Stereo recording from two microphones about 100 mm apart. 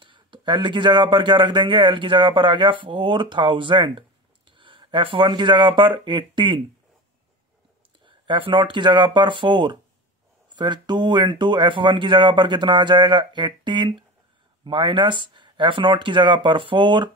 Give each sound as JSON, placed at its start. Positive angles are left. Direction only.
{"t": 0.0, "sound": "speech", "side_deg": -55}
{"t": 8.0, "sound": "speech", "side_deg": -55}